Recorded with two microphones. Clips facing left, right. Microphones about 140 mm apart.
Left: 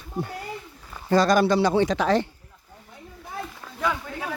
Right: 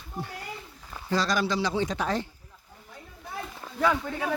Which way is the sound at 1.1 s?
55° left (ahead or behind).